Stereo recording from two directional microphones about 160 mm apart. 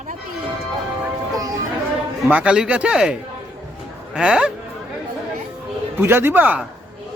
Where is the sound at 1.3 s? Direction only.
20° right (ahead or behind).